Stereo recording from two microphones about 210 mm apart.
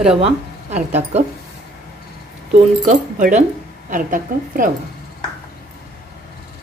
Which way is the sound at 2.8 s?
35° right (ahead or behind).